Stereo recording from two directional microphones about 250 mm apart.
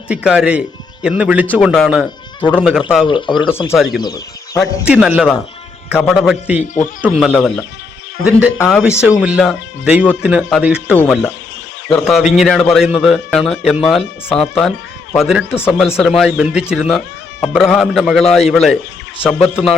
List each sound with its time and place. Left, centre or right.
0.1 s speech: centre
3.1 s speech: centre
4.9 s speech: centre
8.5 s speech: centre
9.0 s speech: centre
15.5 s speech: centre
16.0 s speech: centre